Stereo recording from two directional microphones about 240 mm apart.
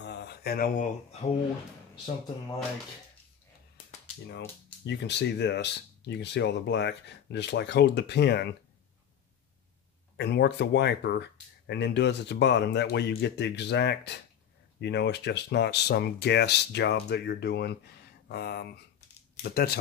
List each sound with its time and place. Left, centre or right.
0.0 s a sound: left
4.8 s speech: left
10.1 s speech: left